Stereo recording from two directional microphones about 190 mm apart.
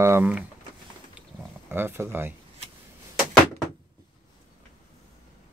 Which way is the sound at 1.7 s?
10° right (ahead or behind).